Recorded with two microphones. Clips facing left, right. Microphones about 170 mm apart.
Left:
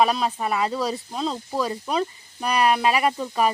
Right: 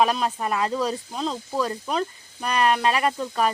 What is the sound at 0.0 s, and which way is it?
Speech, centre (ahead or behind).